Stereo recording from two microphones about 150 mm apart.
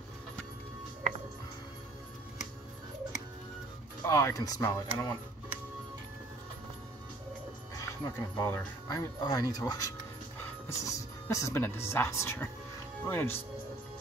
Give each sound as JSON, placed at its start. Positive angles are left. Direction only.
{"t": 4.0, "sound": "speech", "side_deg": 20}
{"t": 7.7, "sound": "speech", "side_deg": 25}